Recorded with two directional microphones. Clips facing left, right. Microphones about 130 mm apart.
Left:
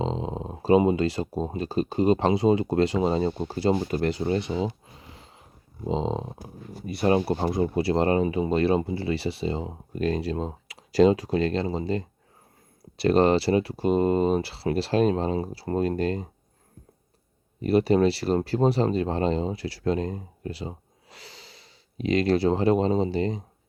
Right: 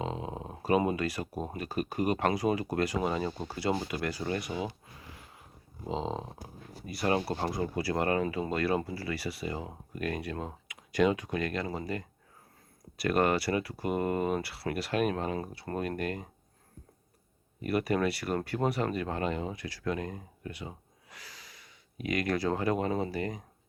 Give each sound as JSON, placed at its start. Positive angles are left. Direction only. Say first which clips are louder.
{"t": 0.0, "sound": "speech", "louder": "left 7 dB", "side_deg": 25}
{"t": 3.8, "sound": "a sound", "louder": "left 8 dB", "side_deg": 35}
{"t": 6.8, "sound": "speech", "louder": "left 7 dB", "side_deg": 25}
{"t": 17.6, "sound": "speech", "louder": "left 8 dB", "side_deg": 25}